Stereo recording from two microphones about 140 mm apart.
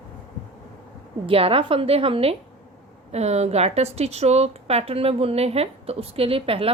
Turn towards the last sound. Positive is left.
turn(degrees=-40)  # may be behind; listen again after turning